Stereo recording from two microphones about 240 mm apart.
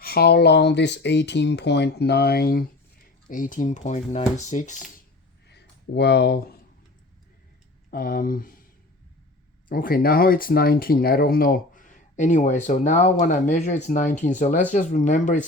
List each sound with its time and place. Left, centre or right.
0.0 s speech: left
5.5 s a sound: left
7.9 s speech: left
9.6 s speech: left